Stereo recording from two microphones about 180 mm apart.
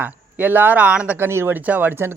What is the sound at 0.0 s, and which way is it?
Speech, 10° right (ahead or behind).